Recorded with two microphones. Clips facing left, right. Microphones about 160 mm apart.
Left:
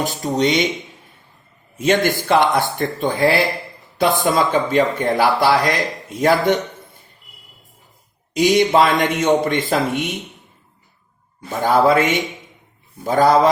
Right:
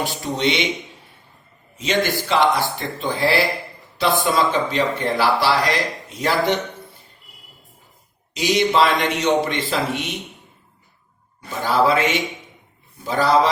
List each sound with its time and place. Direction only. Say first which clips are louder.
0.0 s speech: left 3 dB; 45° left (ahead or behind)
1.7 s speech: left 4 dB; 50° left (ahead or behind)
8.3 s speech: left 5 dB; 50° left (ahead or behind)
11.5 s speech: left 4 dB; 50° left (ahead or behind)